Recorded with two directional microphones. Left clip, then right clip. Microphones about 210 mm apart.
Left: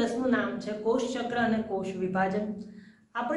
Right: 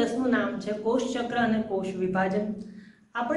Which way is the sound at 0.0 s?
5° right (ahead or behind).